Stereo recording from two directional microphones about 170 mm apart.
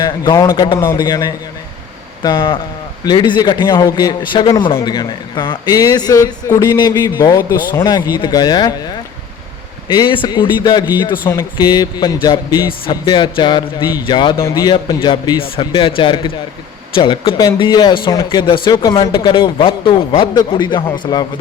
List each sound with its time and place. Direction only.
0.0 s a man's voice: 20° left (ahead or behind)
9.9 s a man's voice: 30° left (ahead or behind)